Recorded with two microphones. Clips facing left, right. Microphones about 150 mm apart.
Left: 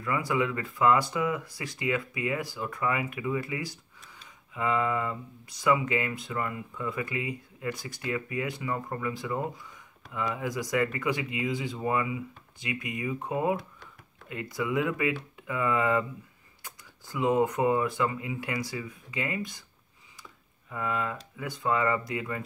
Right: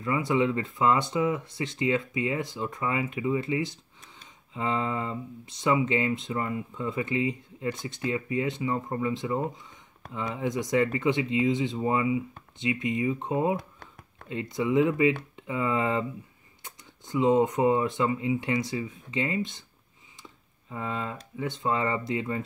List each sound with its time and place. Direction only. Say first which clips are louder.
0.0 s speech: right 3 dB; 25° right (ahead or behind)
20.7 s speech: left 1 dB; 25° right (ahead or behind)